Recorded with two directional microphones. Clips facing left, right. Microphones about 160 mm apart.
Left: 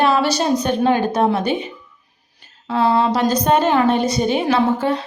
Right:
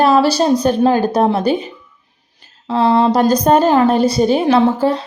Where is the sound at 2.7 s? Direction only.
30° right (ahead or behind).